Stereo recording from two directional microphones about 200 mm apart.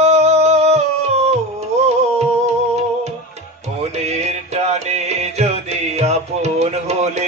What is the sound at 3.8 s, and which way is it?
Music, 30° right (ahead or behind).